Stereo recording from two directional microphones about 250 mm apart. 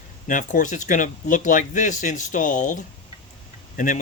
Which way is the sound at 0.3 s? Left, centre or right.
Left.